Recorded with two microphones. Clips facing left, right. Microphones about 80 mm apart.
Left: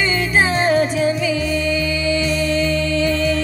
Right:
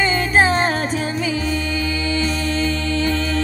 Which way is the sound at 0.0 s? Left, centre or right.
Right.